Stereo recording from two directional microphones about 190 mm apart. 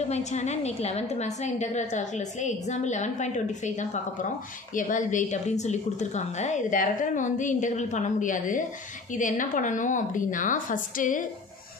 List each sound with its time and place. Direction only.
0.1 s a woman's voice: 35° left (ahead or behind)